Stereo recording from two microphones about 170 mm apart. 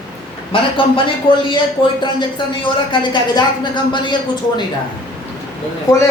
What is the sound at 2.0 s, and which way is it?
Speech, 30° left (ahead or behind).